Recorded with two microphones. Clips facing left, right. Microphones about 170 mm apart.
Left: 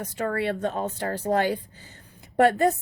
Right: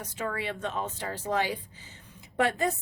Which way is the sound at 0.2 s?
55° left (ahead or behind).